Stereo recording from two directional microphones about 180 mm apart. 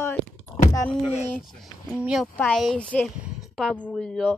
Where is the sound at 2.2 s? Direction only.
10° left (ahead or behind).